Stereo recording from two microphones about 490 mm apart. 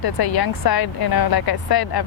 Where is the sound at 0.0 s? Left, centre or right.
Left.